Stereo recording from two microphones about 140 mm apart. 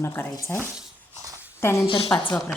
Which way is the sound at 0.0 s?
20° left (ahead or behind).